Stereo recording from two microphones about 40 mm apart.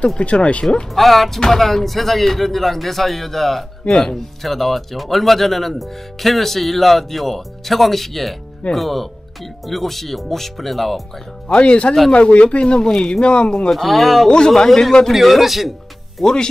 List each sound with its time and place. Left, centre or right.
0.2 s speech: left
0.9 s speech: centre
11.4 s speech: left
13.7 s speech: centre
14.3 s speech: centre
15.1 s speech: centre